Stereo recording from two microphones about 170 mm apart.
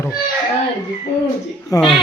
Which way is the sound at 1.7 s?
20° left (ahead or behind).